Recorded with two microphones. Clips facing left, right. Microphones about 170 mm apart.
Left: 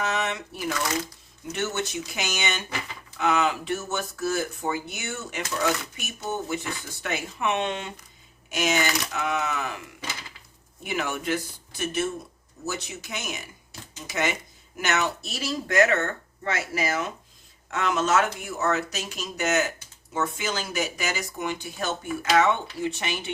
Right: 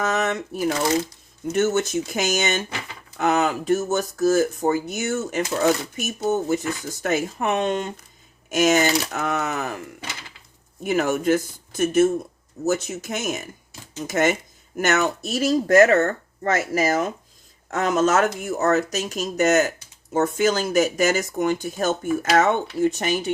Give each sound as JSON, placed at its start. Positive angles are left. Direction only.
{"t": 0.0, "sound": "speech", "side_deg": -45}
{"t": 10.8, "sound": "speech", "side_deg": -45}